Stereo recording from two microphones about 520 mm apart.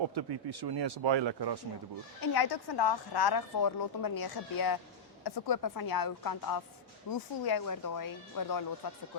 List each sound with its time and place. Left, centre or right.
0.1 s speech: right
2.2 s a woman's voice: left